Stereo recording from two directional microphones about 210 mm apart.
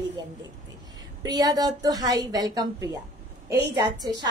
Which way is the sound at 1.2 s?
20° right (ahead or behind).